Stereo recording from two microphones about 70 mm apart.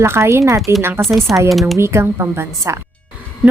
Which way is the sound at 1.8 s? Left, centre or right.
Right.